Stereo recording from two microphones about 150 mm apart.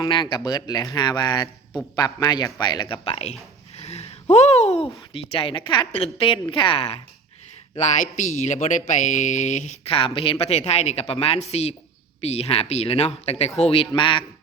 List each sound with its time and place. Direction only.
0.0 s speech: 30° left (ahead or behind)
3.8 s a sound: 45° left (ahead or behind)
5.1 s speech: 35° left (ahead or behind)
7.8 s speech: 55° left (ahead or behind); by 14.3 s 35° left (ahead or behind)